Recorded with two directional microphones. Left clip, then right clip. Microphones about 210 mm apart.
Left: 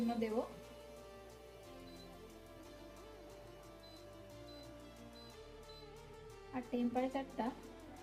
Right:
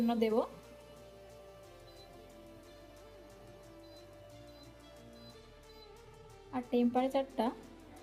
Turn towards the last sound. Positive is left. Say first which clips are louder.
# right 7 dB
turn(degrees=-35)  # may be behind; listen again after turning